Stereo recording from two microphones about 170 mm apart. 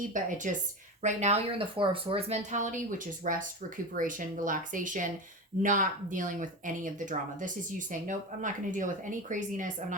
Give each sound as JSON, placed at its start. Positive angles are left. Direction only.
{"t": 0.1, "sound": "speech", "side_deg": -50}